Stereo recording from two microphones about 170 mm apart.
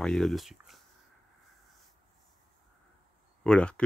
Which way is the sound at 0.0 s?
5° left (ahead or behind).